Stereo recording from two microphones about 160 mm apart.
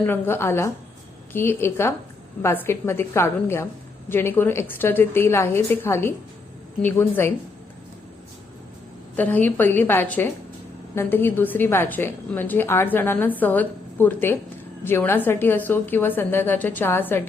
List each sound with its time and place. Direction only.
0.0 s a woman's voice: 15° left (ahead or behind)
9.1 s a woman's voice: 10° left (ahead or behind)